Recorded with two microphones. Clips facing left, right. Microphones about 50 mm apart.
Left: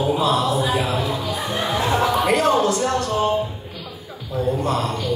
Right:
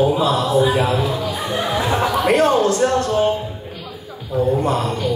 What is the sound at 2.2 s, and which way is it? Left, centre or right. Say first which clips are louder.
Speech: right 6 dB; right.